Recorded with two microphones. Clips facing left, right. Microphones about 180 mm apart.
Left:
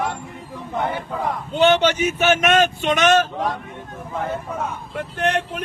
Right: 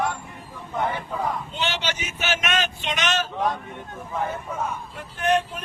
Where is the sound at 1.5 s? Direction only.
55° left (ahead or behind).